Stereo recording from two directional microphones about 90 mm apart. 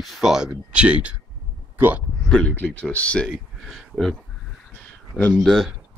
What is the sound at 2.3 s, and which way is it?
Speech, 10° left (ahead or behind).